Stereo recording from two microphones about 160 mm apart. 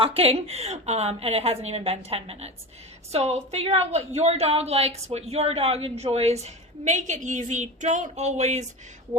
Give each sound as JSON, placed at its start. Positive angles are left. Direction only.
{"t": 0.0, "sound": "a woman's voice", "side_deg": -35}